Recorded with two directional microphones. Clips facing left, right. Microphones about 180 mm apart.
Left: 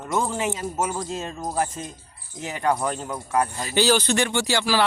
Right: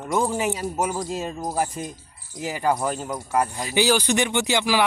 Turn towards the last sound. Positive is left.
turn(degrees=-15)  # may be behind; listen again after turning